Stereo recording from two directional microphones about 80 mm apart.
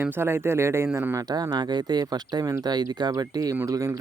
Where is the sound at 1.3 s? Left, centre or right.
Right.